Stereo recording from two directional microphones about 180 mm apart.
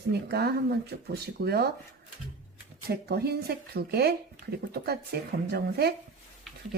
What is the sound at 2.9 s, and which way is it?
Speech, 60° right (ahead or behind).